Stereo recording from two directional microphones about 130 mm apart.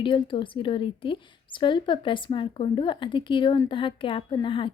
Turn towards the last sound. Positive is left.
turn(degrees=40)  # may be behind; listen again after turning